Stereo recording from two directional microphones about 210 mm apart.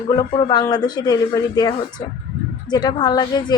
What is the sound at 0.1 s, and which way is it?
A woman's voice, 25° left (ahead or behind).